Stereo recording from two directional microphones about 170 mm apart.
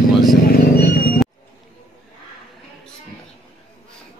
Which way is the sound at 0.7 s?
65° left (ahead or behind).